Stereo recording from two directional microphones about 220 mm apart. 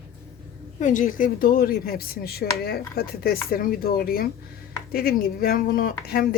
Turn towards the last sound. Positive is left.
turn(degrees=45)  # may be behind; listen again after turning